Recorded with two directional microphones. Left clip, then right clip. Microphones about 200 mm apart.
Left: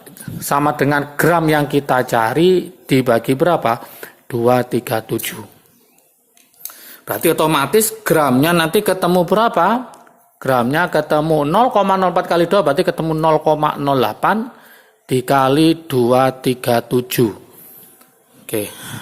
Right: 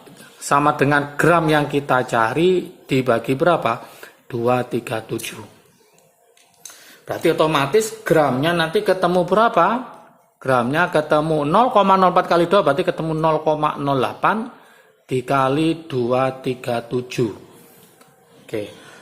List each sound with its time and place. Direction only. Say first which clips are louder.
0.4 s speech: left 1 dB; 10° left (ahead or behind)
6.8 s speech: left 3 dB; 25° left (ahead or behind)
18.4 s speech: left 5 dB; 25° left (ahead or behind)